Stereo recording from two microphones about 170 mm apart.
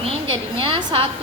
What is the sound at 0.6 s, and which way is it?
Speech, 30° right (ahead or behind).